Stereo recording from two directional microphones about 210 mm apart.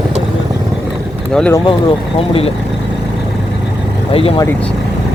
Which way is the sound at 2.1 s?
25° left (ahead or behind).